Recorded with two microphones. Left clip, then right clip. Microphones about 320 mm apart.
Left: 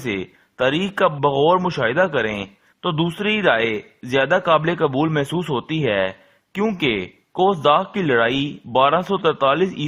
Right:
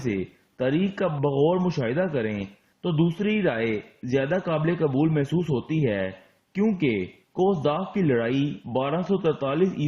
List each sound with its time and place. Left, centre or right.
0.5 s a man's voice: left